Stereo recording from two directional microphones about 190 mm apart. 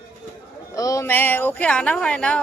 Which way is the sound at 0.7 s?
20° left (ahead or behind).